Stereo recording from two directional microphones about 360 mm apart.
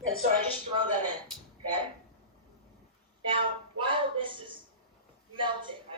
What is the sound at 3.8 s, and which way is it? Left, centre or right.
A man's voice, centre.